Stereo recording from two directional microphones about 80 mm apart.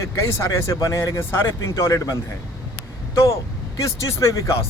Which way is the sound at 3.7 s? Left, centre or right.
Left.